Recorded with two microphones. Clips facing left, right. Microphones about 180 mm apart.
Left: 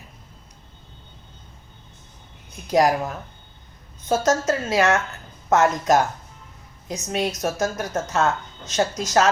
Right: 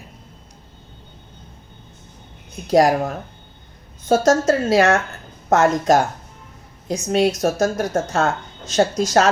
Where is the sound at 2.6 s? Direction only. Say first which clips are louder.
Right 4 dB; 30° right (ahead or behind).